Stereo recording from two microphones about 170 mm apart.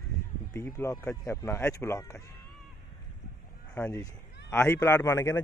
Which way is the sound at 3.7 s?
10° left (ahead or behind).